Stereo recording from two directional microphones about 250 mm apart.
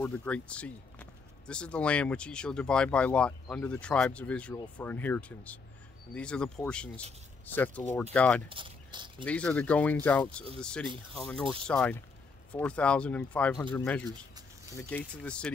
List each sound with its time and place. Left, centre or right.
0.0 s speech: centre
8.5 s a sound: centre
9.2 s speech: centre